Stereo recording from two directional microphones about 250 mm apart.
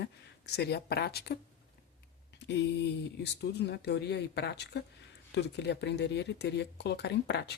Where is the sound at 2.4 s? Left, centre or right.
Left.